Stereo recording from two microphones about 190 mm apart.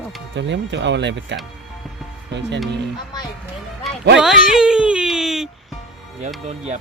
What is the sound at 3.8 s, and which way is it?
Music, centre (ahead or behind).